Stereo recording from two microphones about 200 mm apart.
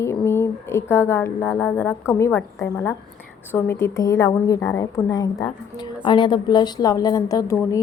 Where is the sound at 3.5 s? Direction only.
10° left (ahead or behind).